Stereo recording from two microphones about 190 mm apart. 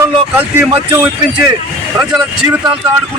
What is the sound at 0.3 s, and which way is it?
Speech, 10° right (ahead or behind).